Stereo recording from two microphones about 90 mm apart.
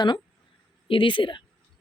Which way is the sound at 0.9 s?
70° left (ahead or behind).